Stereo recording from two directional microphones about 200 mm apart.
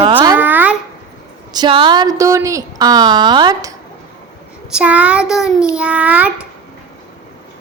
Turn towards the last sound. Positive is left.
turn(degrees=-5)  # may be behind; listen again after turning